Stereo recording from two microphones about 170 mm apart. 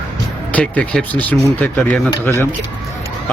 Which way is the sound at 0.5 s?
5° left (ahead or behind).